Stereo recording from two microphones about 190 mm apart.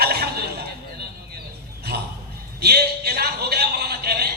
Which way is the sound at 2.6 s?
55° right (ahead or behind).